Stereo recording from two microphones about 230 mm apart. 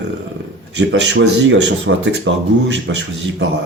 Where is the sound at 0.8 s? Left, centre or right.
Right.